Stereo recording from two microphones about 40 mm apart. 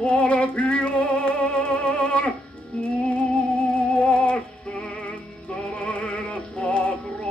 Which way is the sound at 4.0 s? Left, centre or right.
Left.